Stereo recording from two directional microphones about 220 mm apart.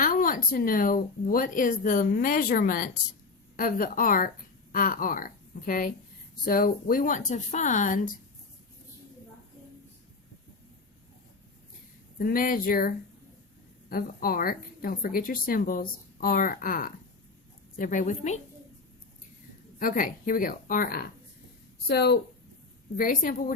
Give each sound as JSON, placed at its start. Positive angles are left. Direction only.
{"t": 0.0, "sound": "a woman's voice", "side_deg": 40}
{"t": 12.2, "sound": "speech", "side_deg": 40}
{"t": 13.9, "sound": "speech", "side_deg": 40}
{"t": 19.8, "sound": "a woman's voice", "side_deg": 40}